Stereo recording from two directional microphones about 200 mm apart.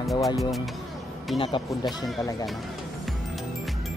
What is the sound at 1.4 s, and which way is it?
Speech, 25° left (ahead or behind).